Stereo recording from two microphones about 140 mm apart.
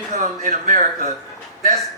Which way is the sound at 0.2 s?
65° right (ahead or behind).